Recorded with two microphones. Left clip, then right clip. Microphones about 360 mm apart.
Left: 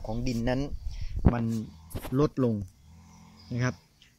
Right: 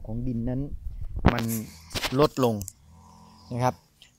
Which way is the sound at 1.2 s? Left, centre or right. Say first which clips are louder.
Right 5 dB; right.